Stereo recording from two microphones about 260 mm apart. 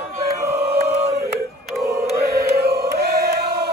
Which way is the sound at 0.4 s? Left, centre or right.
Centre.